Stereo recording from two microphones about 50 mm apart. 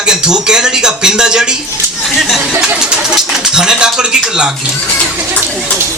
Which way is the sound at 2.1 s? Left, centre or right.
Centre.